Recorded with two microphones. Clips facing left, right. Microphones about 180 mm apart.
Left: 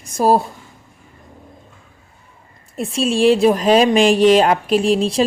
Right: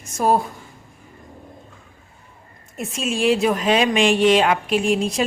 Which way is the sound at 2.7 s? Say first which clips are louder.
Left 6 dB; 30° left (ahead or behind).